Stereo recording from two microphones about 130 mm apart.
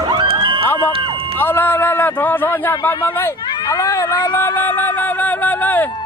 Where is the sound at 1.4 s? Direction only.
15° left (ahead or behind).